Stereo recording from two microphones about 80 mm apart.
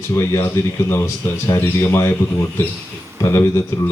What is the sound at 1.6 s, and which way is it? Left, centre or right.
Speech, left.